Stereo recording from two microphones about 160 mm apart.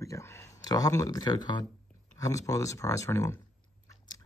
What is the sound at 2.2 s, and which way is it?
Speech, 20° left (ahead or behind).